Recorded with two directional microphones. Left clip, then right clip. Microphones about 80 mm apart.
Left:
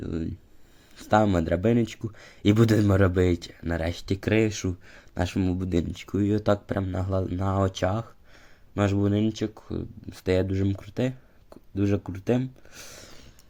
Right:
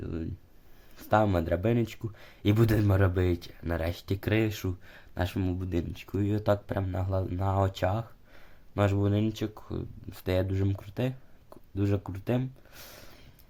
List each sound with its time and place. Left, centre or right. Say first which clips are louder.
0.0 s a sound: left 5 dB; left
0.9 s speech: left 3 dB; left
3.7 s speech: left 3 dB; left
5.5 s speech: left 6 dB; left
6.1 s speech: left 4 dB; left
8.7 s speech: left 3 dB; centre
10.8 s speech: left 4 dB; left